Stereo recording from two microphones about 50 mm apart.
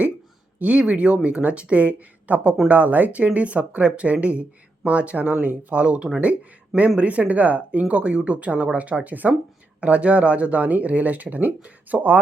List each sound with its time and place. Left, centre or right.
0.6 s speech: right